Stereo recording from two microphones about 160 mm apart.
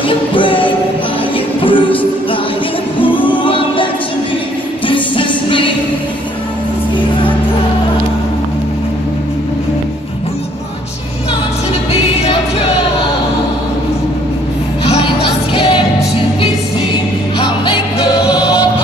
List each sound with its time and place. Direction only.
0.3 s music: 30° left (ahead or behind)
3.3 s music: 35° left (ahead or behind)
11.9 s music: 40° left (ahead or behind)
18.2 s music: 5° right (ahead or behind)